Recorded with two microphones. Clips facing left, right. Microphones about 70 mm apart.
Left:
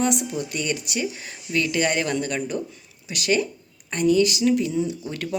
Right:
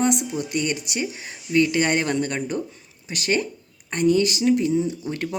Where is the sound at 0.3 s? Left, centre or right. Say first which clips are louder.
Right 2 dB; right.